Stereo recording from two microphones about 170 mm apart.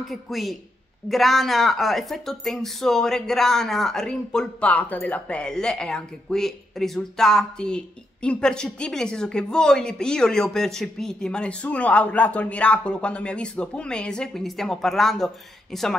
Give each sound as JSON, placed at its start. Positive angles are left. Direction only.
{"t": 0.1, "sound": "speech", "side_deg": 0}